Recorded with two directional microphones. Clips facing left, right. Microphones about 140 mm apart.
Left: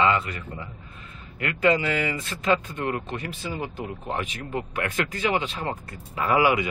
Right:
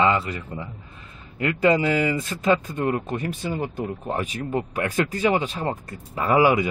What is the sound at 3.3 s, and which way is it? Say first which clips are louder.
Speech: right 4 dB; 45° right (ahead or behind).